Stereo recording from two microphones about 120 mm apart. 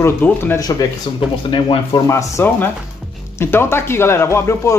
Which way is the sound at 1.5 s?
45° left (ahead or behind).